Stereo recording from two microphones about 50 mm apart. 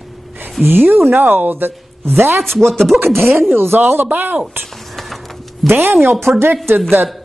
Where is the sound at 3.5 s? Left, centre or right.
Right.